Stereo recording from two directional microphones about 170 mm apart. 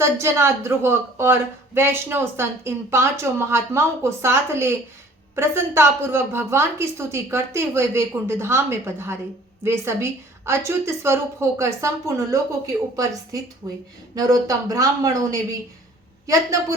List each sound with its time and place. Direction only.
0.0 s speech: 15° right (ahead or behind)